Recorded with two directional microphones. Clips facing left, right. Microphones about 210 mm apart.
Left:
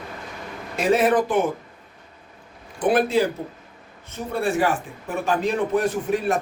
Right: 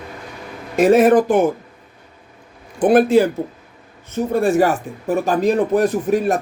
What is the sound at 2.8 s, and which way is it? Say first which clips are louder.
Speech: right 7 dB; 50° right (ahead or behind).